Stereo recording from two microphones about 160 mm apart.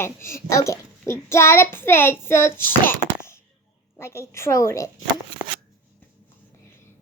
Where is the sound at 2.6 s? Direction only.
15° left (ahead or behind).